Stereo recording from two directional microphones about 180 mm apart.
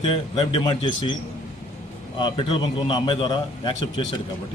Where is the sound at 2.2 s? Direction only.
25° left (ahead or behind).